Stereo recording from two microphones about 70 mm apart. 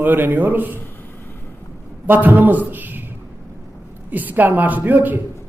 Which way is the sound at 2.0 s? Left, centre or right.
Right.